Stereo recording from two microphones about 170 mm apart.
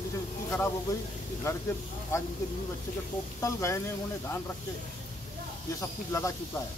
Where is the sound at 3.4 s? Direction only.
20° left (ahead or behind).